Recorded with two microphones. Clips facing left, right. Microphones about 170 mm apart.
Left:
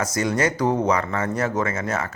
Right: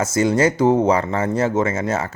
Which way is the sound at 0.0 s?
25° right (ahead or behind).